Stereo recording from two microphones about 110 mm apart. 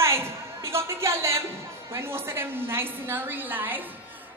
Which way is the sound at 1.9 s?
20° right (ahead or behind).